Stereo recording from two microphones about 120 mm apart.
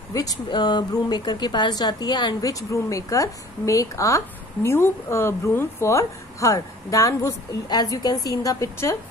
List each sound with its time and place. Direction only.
0.1 s a woman's voice: 30° left (ahead or behind)
2.7 s a woman's voice: 25° left (ahead or behind)